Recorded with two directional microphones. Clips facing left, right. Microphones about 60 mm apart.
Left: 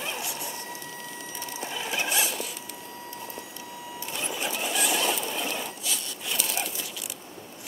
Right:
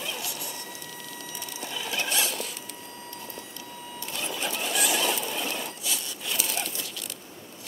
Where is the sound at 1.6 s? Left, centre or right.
Left.